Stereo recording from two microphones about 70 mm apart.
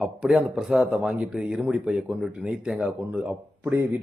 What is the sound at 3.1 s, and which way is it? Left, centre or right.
Speech, centre.